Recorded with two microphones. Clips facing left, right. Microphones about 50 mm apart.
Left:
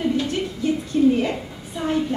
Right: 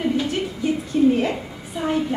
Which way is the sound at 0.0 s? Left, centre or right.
Centre.